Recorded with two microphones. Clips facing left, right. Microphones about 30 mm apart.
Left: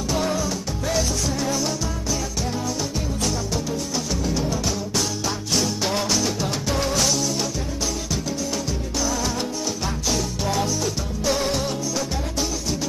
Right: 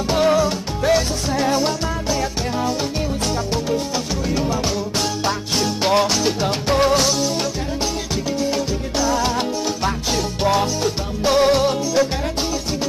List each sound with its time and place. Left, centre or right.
0.1 s music: right
4.9 s music: right
9.0 s music: right